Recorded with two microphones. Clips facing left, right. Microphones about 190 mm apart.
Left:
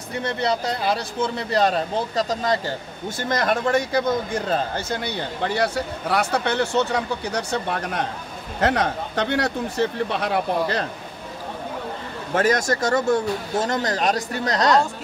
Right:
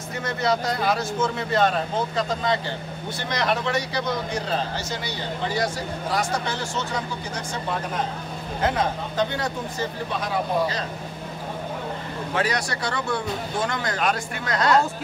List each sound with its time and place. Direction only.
0.2 s speech: 30° left (ahead or behind); by 10.9 s 65° left (ahead or behind)
12.4 s speech: 45° left (ahead or behind)